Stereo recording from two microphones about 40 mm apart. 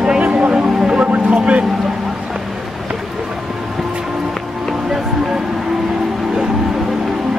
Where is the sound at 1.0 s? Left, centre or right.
Right.